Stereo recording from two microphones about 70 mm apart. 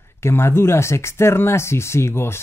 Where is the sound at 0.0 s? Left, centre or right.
Left.